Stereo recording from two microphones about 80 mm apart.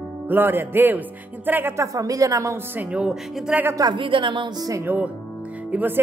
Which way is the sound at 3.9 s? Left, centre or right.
Right.